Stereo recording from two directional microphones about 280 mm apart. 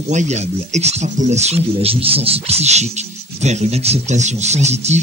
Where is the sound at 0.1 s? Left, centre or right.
Right.